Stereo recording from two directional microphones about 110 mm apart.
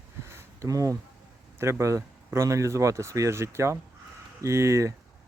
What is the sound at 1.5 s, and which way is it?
Speech, 25° right (ahead or behind).